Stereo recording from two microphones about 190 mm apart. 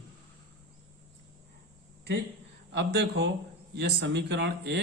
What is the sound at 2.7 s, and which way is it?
Speech, 65° right (ahead or behind).